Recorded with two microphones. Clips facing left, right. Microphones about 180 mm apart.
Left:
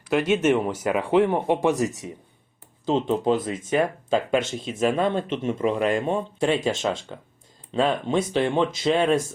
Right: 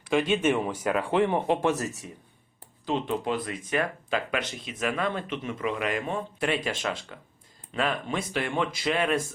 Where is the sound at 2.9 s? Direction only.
35° left (ahead or behind).